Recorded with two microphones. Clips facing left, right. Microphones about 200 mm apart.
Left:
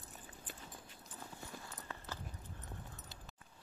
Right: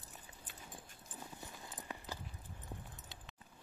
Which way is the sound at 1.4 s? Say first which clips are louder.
Left 1 dB; 15° right (ahead or behind).